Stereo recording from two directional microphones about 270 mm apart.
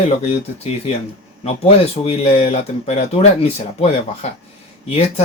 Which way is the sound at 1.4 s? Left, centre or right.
Left.